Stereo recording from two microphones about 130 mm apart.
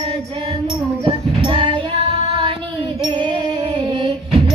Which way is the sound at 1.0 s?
45° right (ahead or behind).